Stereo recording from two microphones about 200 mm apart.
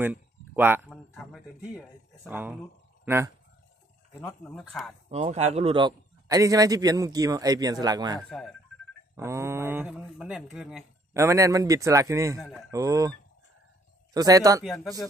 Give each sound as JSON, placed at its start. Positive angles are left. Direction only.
{"t": 0.0, "sound": "a sound", "side_deg": -10}
{"t": 1.1, "sound": "music", "side_deg": 0}
{"t": 2.2, "sound": "speech", "side_deg": -10}
{"t": 4.2, "sound": "speech", "side_deg": 5}
{"t": 5.1, "sound": "a man's voice", "side_deg": -35}
{"t": 11.1, "sound": "speech", "side_deg": -15}
{"t": 12.4, "sound": "speech", "side_deg": 0}
{"t": 12.7, "sound": "speech", "side_deg": -15}
{"t": 14.1, "sound": "speech", "side_deg": -20}
{"t": 14.6, "sound": "speech", "side_deg": 0}